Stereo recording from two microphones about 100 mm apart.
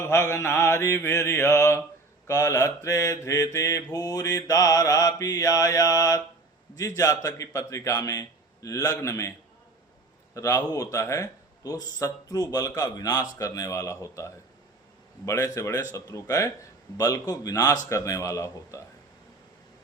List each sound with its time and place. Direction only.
0.0 s mantra: 25° left (ahead or behind)
2.2 s a man's voice: 30° left (ahead or behind)
10.3 s a man's voice: 30° left (ahead or behind)